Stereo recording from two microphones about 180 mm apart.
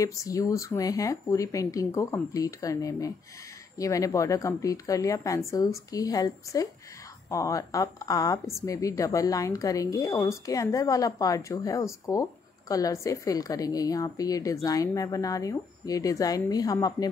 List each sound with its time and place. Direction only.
0.0 s a woman's voice: 20° left (ahead or behind)